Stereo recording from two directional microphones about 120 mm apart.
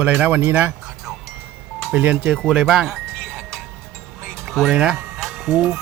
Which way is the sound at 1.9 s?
15° right (ahead or behind).